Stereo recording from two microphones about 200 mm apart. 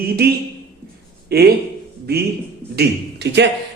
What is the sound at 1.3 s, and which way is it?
Speech, 50° right (ahead or behind).